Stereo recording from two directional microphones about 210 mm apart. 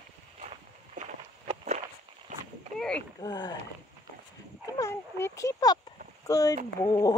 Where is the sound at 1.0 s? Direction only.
40° right (ahead or behind).